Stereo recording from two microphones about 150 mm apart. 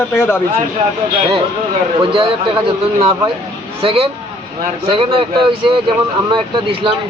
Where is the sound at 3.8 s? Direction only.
40° right (ahead or behind).